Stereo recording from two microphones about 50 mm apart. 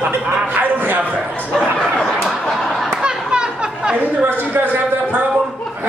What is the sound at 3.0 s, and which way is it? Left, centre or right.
Chatter, centre.